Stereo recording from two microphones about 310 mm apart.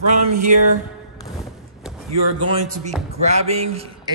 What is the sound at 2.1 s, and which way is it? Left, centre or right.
A man's voice, right.